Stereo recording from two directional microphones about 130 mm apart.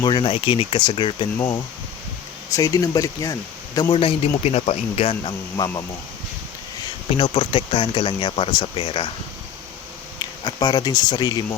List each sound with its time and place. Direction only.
0.0 s speech: 40° left (ahead or behind)
2.5 s speech: 25° left (ahead or behind)
3.8 s speech: 40° left (ahead or behind)
5.5 s speech: 30° left (ahead or behind)
7.2 s speech: 40° left (ahead or behind)
10.2 s speech: 30° left (ahead or behind)